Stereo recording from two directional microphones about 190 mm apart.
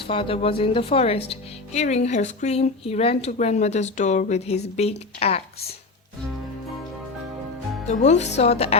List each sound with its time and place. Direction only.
0.0 s a woman's voice: 30° left (ahead or behind)
7.9 s a woman's voice: 40° left (ahead or behind)